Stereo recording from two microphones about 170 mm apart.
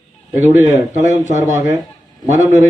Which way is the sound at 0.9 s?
45° right (ahead or behind).